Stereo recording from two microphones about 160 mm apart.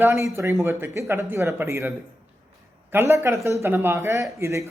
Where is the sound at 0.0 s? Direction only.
15° right (ahead or behind).